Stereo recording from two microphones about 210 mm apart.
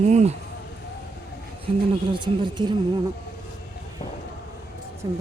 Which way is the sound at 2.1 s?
20° right (ahead or behind).